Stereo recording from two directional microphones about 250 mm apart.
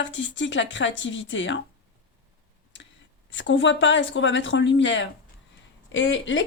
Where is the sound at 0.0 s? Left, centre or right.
Left.